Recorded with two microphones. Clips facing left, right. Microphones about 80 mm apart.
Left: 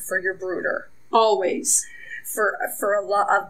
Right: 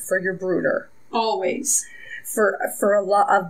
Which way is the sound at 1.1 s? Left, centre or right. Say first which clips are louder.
Left 4 dB; left.